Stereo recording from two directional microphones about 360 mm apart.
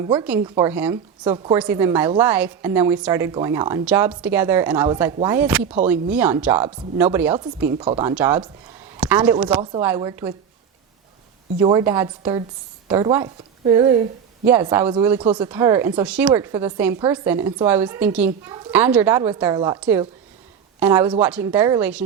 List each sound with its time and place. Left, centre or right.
0.0 s a woman's voice: centre
8.1 s a woman's voice: centre
11.6 s a woman's voice: centre